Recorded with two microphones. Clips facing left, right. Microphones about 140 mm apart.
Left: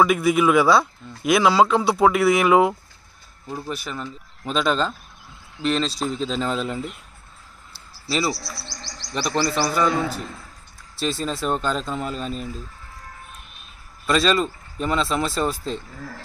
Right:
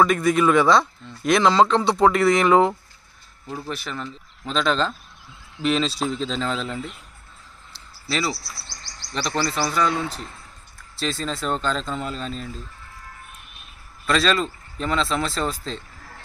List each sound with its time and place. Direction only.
0.0 s speech: 5° left (ahead or behind)
8.4 s chirp: 90° left
9.4 s speech: 10° left (ahead or behind)
11.0 s speech: 5° left (ahead or behind)
14.1 s speech: 5° left (ahead or behind)